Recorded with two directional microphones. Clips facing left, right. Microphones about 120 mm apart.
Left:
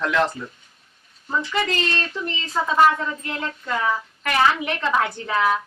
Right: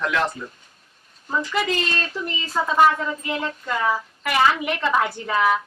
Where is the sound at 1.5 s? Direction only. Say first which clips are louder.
Even; 5° right (ahead or behind).